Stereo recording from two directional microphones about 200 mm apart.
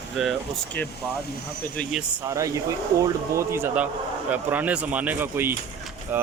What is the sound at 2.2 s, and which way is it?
Speech, 15° right (ahead or behind).